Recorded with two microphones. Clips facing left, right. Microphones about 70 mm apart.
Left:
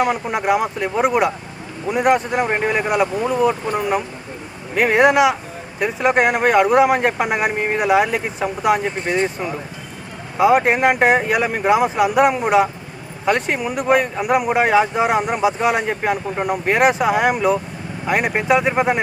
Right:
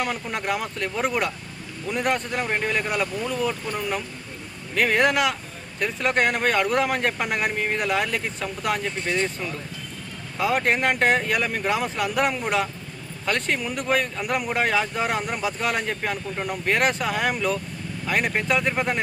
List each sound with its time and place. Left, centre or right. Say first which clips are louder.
0.0 s speech: left 8 dB; centre
9.0 s speech: left 5 dB; left